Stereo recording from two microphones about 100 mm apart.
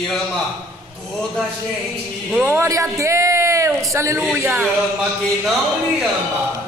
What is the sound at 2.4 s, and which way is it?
Speech, 25° right (ahead or behind).